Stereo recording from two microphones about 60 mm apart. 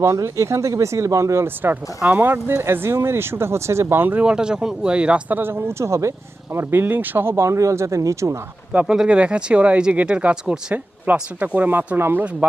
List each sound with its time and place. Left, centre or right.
0.0 s speech: right
2.0 s speech: right
4.2 s speech: centre
5.3 s speech: right
8.7 s speech: right
11.0 s speech: right
11.7 s speech: right
12.4 s speech: right